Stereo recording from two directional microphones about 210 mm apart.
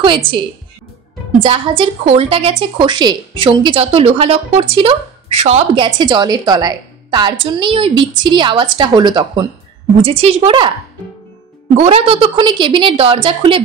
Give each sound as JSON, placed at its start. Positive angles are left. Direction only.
{"t": 1.4, "sound": "a woman's voice", "side_deg": -25}
{"t": 11.7, "sound": "a woman's voice", "side_deg": -30}